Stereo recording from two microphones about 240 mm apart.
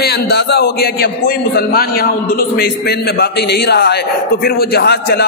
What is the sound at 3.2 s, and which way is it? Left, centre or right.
A man's voice, left.